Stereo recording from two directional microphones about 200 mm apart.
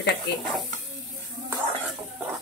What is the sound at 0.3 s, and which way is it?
Speech, 55° left (ahead or behind).